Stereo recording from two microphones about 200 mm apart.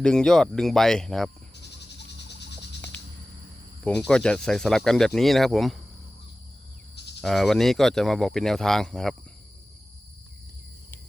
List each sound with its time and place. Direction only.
0.0 s speech: 5° left (ahead or behind)
1.6 s cricket: 60° left (ahead or behind)
4.1 s speech: 5° left (ahead or behind)
7.2 s speech: centre (ahead or behind)